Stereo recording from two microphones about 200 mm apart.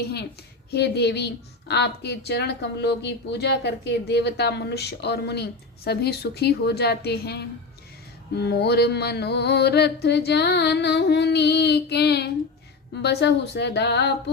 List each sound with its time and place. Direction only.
0.7 s a woman's voice: 55° left (ahead or behind)